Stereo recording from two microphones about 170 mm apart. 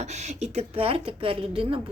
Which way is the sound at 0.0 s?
40° right (ahead or behind).